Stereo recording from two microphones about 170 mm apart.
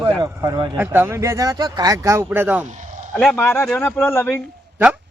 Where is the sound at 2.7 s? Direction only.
45° right (ahead or behind).